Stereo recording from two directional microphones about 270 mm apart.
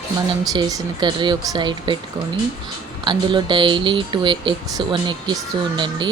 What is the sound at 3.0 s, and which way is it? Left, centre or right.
Speech, centre.